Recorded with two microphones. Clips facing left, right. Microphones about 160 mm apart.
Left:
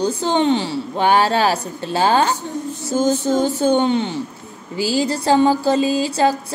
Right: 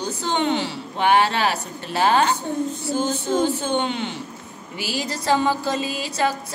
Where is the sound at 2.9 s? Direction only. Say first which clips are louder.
Left 7 dB; 40° left (ahead or behind).